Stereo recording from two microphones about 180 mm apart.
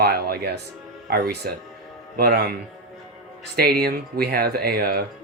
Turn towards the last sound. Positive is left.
turn(degrees=-60)  # may be behind; listen again after turning